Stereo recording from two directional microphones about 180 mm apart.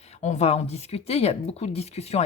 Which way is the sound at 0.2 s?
40° left (ahead or behind).